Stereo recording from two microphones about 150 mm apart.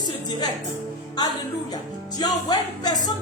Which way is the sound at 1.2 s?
25° left (ahead or behind).